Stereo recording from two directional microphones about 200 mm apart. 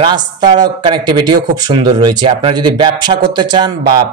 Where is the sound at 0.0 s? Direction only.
20° right (ahead or behind).